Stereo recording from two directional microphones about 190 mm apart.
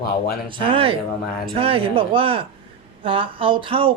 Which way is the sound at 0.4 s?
30° right (ahead or behind).